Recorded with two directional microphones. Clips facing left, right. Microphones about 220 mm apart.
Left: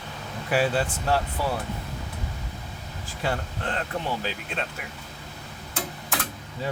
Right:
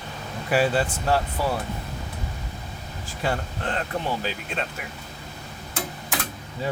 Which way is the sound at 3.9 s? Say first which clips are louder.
Right 2 dB; 40° right (ahead or behind).